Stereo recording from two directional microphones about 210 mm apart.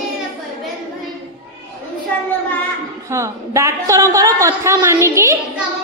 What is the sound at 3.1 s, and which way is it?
A woman's voice, 15° right (ahead or behind).